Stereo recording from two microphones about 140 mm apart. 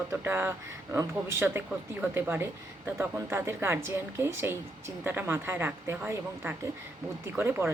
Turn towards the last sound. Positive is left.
turn(degrees=-15)  # may be behind; listen again after turning